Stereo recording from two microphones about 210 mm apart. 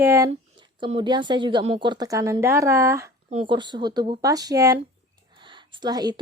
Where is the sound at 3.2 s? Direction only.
25° right (ahead or behind).